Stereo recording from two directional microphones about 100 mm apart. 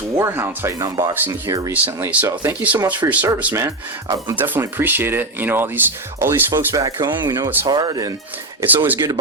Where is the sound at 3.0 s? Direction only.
15° right (ahead or behind).